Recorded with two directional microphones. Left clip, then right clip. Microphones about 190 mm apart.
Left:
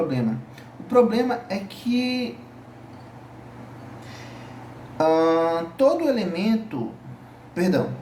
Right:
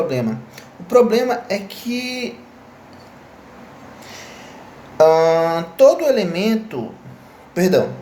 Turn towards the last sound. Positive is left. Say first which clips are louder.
# right 7 dB
turn(degrees=-55)  # may be behind; listen again after turning